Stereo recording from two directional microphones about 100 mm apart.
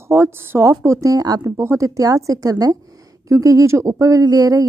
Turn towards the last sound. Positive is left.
turn(degrees=-35)  # may be behind; listen again after turning